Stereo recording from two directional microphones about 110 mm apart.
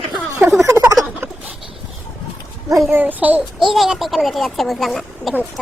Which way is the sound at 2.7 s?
25° right (ahead or behind).